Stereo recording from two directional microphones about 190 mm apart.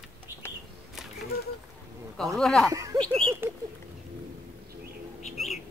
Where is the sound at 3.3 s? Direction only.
15° right (ahead or behind).